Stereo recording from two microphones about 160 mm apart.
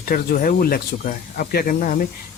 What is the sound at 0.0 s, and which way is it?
Speech, 65° left (ahead or behind).